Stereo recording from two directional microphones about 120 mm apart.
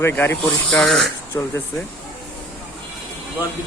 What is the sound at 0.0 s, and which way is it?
Speech, 20° left (ahead or behind).